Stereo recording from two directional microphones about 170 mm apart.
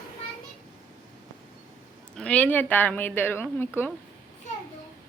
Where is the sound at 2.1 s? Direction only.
5° left (ahead or behind).